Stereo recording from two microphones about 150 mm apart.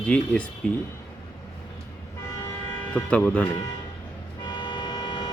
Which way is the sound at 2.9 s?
10° left (ahead or behind).